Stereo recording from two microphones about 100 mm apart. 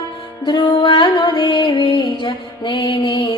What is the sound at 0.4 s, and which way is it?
Music, 50° left (ahead or behind).